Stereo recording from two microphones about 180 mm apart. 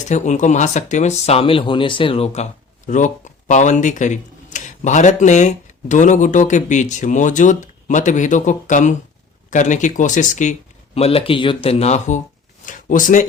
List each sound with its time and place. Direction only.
0.1 s speech: 40° left (ahead or behind)
10.9 s speech: 35° left (ahead or behind)
12.6 s a sound: 45° left (ahead or behind)